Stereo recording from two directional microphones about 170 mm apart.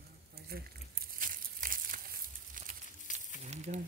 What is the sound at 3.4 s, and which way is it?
Typewriter, 45° right (ahead or behind).